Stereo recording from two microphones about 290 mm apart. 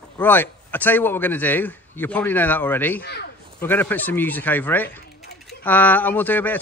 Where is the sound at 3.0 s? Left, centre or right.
Left.